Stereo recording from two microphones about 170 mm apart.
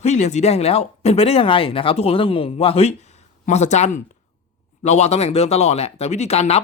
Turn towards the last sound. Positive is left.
turn(degrees=40)  # may be behind; listen again after turning